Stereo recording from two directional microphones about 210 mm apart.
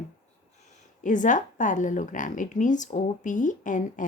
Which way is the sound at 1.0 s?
35° left (ahead or behind).